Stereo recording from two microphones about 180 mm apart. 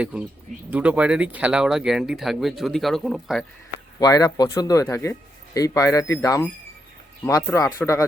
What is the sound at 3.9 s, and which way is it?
Speech, 20° left (ahead or behind).